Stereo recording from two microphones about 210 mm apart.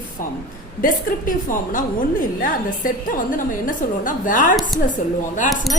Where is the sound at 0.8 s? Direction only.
40° left (ahead or behind).